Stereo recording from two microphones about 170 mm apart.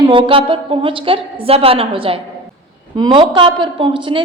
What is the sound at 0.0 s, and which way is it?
A woman's voice, 30° right (ahead or behind).